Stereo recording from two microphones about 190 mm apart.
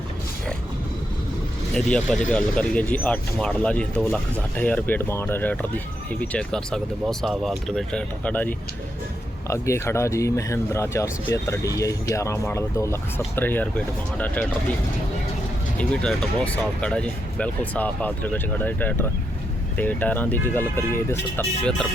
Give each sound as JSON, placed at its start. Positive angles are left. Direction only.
{"t": 1.7, "sound": "speech", "side_deg": 5}
{"t": 15.8, "sound": "speech", "side_deg": 5}